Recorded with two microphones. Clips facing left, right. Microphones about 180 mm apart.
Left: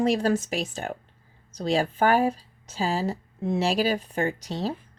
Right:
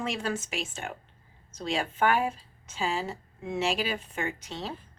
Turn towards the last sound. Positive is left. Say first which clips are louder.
# left 7 dB
turn(degrees=40)  # may be behind; listen again after turning